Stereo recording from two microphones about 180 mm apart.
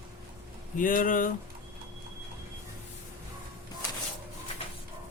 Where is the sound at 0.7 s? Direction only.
50° left (ahead or behind).